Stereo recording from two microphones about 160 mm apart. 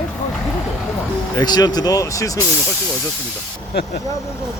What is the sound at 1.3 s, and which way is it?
Speech, 25° left (ahead or behind).